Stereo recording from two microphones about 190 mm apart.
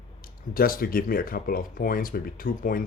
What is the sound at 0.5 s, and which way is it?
Speech, 50° left (ahead or behind).